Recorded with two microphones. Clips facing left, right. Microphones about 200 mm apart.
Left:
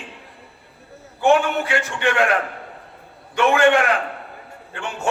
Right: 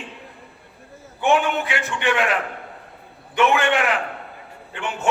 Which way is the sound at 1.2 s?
15° right (ahead or behind).